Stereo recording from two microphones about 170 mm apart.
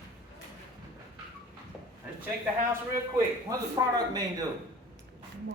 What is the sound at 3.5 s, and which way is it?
Speech, 25° right (ahead or behind).